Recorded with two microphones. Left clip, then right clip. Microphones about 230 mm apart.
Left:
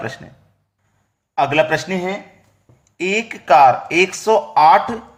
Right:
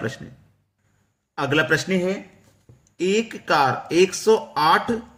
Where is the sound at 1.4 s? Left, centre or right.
Centre.